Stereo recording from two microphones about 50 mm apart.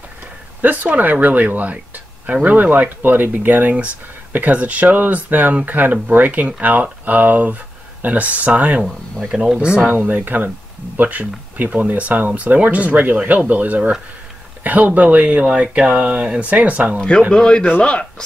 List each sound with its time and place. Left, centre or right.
0.6 s speech: right
9.3 s speech: centre
9.9 s speech: right
17.3 s speech: centre